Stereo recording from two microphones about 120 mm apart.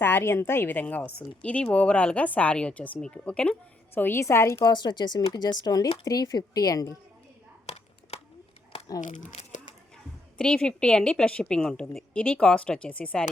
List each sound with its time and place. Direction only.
0.0 s a woman's voice: 20° left (ahead or behind)
4.6 s a woman's voice: 40° left (ahead or behind)
8.1 s a sound: 60° left (ahead or behind)
9.0 s speech: 90° left
10.3 s a woman's voice: 5° left (ahead or behind)